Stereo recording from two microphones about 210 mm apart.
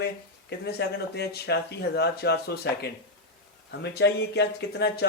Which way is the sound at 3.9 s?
55° left (ahead or behind).